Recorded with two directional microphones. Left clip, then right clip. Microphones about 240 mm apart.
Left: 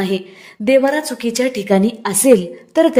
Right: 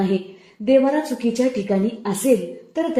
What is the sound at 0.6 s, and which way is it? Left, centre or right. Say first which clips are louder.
A woman's voice: left 3 dB; left.